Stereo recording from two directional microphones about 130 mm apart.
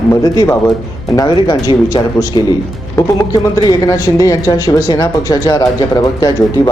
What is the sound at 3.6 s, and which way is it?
A woman's voice, 30° left (ahead or behind).